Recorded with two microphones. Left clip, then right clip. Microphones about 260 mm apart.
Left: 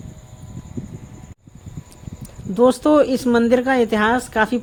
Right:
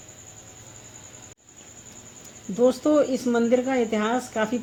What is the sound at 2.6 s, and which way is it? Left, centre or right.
Speech, left.